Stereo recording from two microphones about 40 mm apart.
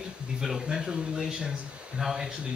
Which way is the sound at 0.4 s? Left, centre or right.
Centre.